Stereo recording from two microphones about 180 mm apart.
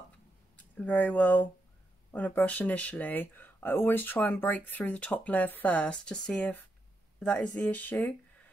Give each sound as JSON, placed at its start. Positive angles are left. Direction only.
{"t": 0.6, "sound": "speech", "side_deg": 10}